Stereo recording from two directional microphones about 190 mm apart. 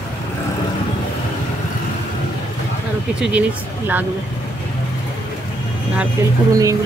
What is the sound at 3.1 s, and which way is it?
Speech, 5° right (ahead or behind).